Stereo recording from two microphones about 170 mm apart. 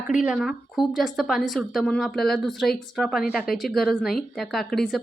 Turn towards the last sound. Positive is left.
turn(degrees=0)  # may be behind; listen again after turning